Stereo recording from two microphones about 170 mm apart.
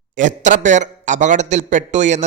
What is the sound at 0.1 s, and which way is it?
A man's voice, 45° right (ahead or behind).